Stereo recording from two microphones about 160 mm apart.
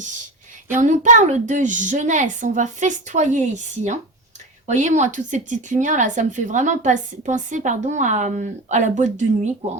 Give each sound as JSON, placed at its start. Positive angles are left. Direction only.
{"t": 0.8, "sound": "a woman's voice", "side_deg": -50}